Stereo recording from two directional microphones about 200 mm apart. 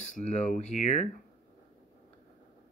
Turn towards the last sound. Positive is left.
turn(degrees=35)  # may be behind; listen again after turning